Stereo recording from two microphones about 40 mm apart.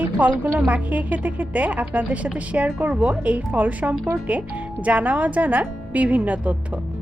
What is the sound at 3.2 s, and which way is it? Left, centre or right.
Speech, right.